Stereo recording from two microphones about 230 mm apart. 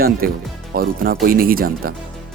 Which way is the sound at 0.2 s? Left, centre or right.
Right.